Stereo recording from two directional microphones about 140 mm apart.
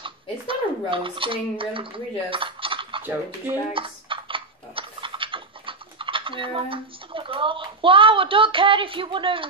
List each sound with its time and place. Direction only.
0.0 s speech: 40° right (ahead or behind)
3.0 s speech: 15° right (ahead or behind)
3.7 s a sound: 40° right (ahead or behind)